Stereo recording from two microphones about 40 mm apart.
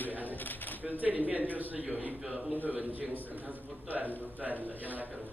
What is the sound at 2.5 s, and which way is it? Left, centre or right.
Speech, right.